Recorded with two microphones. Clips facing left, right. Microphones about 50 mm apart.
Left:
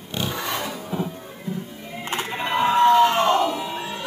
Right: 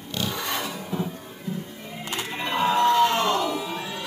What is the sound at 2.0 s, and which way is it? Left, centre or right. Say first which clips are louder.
Music: left 4 dB; left.